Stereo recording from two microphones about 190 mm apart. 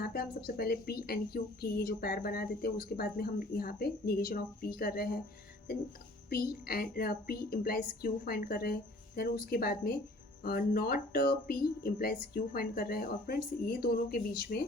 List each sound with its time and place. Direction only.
0.0 s a woman's voice: 55° left (ahead or behind)
6.3 s a woman's voice: 50° left (ahead or behind)